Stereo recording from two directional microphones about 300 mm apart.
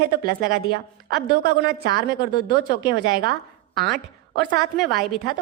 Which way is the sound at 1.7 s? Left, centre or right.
Right.